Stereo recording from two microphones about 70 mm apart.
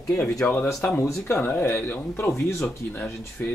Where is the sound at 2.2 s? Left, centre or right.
Left.